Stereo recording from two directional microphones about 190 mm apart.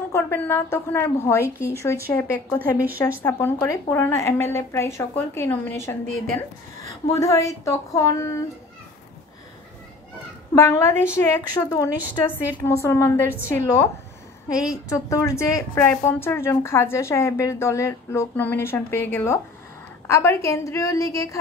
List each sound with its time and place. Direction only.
0.1 s speech: 10° left (ahead or behind)
2.8 s speech: 10° right (ahead or behind)
3.2 s speech: 10° left (ahead or behind)
10.5 s speech: 15° left (ahead or behind)
14.9 s speech: 15° left (ahead or behind)